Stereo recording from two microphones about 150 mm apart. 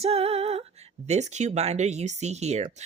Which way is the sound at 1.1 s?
50° right (ahead or behind).